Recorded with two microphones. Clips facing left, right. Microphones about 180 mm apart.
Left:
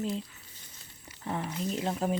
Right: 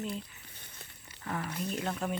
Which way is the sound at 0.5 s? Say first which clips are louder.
Right 3 dB; 60° right (ahead or behind).